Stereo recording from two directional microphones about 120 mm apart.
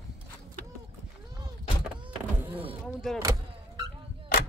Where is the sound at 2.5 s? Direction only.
50° right (ahead or behind).